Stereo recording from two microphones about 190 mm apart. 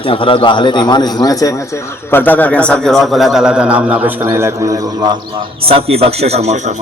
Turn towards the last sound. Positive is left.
turn(degrees=-35)  # may be behind; listen again after turning